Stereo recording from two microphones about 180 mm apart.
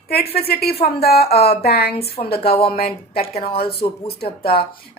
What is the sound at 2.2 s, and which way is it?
Speech, 60° left (ahead or behind).